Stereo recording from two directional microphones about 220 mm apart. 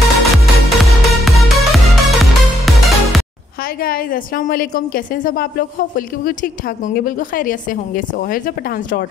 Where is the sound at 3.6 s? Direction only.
40° left (ahead or behind).